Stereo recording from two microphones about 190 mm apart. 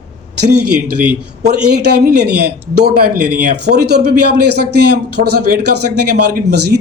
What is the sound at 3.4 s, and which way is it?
A man's voice, 60° right (ahead or behind).